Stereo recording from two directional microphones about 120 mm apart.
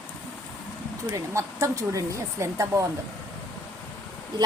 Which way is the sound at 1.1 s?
25° right (ahead or behind).